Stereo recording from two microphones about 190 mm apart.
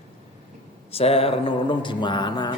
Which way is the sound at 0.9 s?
30° left (ahead or behind).